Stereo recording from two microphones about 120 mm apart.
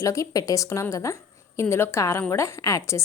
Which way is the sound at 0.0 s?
30° left (ahead or behind).